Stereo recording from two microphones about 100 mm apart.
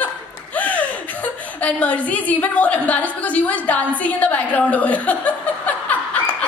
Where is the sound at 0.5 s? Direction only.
15° left (ahead or behind).